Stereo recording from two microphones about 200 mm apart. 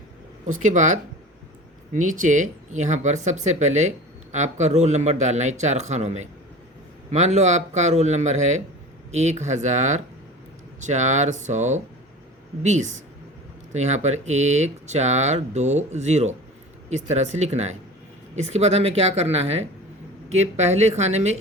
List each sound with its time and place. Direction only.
0.6 s speech: 40° right (ahead or behind)